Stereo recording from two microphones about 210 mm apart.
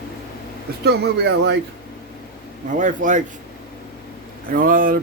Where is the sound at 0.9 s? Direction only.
50° right (ahead or behind).